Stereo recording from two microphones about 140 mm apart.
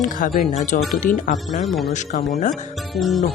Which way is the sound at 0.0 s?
80° left.